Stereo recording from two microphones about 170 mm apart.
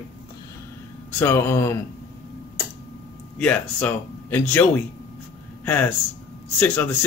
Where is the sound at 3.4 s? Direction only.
10° left (ahead or behind).